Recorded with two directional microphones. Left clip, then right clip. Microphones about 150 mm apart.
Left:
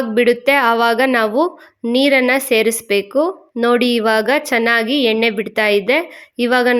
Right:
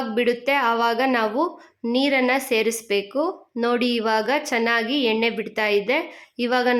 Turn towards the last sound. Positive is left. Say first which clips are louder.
# left 6 dB
turn(degrees=30)  # may be behind; listen again after turning